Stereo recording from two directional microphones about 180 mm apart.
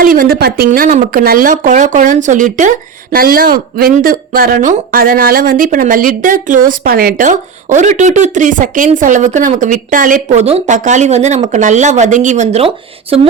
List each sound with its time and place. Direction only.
0.0 s speech: 50° right (ahead or behind); by 13.2 s 35° right (ahead or behind)